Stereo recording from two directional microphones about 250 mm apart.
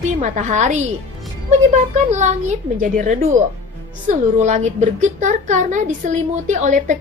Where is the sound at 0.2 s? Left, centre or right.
Right.